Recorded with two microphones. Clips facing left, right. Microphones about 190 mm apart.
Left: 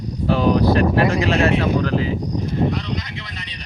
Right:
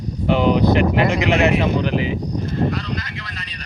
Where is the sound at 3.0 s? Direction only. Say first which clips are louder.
Even; 20° left (ahead or behind).